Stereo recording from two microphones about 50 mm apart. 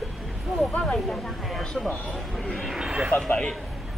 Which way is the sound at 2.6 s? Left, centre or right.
Centre.